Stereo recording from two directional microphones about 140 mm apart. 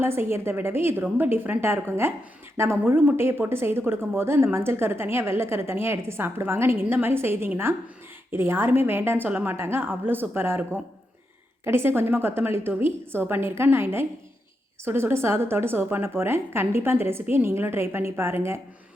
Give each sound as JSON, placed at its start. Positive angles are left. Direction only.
{"t": 0.0, "sound": "a woman's voice", "side_deg": -15}